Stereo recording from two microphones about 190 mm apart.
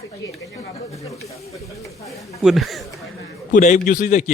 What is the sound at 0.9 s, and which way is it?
Snake, 15° left (ahead or behind).